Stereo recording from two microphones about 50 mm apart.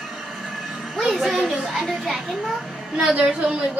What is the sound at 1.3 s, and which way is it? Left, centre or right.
A child's voice, centre.